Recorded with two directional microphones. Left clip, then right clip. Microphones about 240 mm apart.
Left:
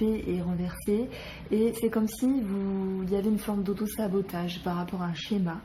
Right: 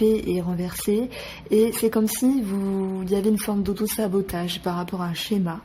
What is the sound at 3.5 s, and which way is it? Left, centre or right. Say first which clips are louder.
Speech: right 5 dB; right.